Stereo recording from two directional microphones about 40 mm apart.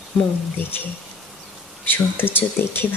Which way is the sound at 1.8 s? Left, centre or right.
Left.